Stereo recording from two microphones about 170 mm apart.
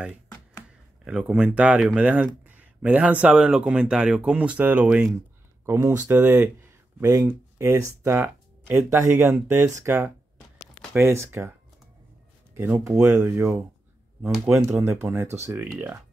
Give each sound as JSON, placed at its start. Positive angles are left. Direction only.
{"t": 1.0, "sound": "speech", "side_deg": -5}
{"t": 12.5, "sound": "speech", "side_deg": -15}
{"t": 14.7, "sound": "speech", "side_deg": -15}